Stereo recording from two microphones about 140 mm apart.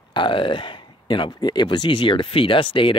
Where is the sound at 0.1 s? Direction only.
35° left (ahead or behind).